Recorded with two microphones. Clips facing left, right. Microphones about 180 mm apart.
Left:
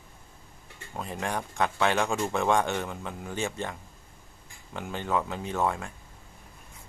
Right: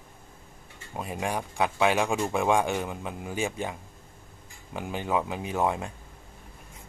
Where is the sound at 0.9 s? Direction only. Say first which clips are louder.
Right 1 dB; 15° right (ahead or behind).